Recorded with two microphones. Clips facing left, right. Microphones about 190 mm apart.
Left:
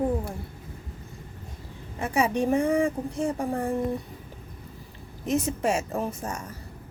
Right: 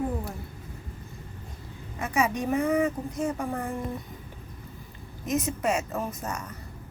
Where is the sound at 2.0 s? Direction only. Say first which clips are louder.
Left 2 dB; 30° left (ahead or behind).